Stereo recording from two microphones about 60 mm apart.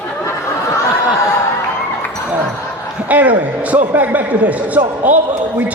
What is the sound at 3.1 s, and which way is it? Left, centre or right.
A man's voice, right.